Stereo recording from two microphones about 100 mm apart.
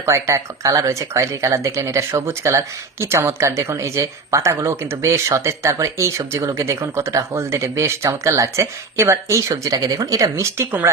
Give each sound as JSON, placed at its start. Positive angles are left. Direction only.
{"t": 0.0, "sound": "speech", "side_deg": -30}